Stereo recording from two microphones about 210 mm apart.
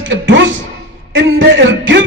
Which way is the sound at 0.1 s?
65° right (ahead or behind).